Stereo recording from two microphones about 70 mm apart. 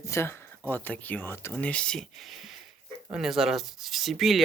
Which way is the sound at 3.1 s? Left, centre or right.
Centre.